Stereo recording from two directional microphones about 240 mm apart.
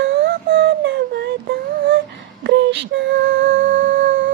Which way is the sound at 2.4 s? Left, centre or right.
Right.